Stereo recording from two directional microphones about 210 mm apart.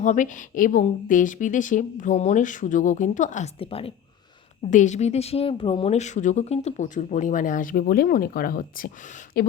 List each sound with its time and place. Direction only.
0.0 s speech: 35° left (ahead or behind)